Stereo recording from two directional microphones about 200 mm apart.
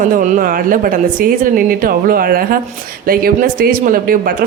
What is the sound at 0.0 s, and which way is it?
A woman's voice, 40° right (ahead or behind).